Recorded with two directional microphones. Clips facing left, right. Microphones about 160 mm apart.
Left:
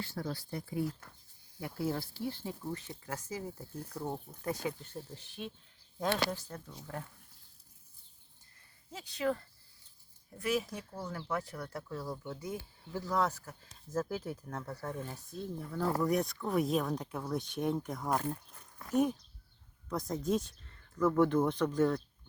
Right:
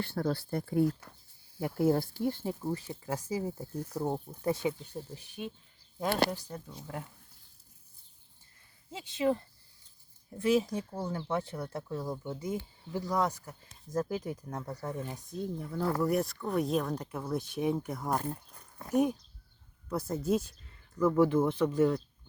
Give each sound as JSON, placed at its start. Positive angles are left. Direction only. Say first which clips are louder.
{"t": 0.0, "sound": "speech", "louder": "right 7 dB", "side_deg": -60}
{"t": 2.5, "sound": "speech", "louder": "right 6 dB", "side_deg": -35}
{"t": 4.8, "sound": "speech", "louder": "right 3 dB", "side_deg": -10}
{"t": 8.9, "sound": "speech", "louder": "right 4 dB", "side_deg": -25}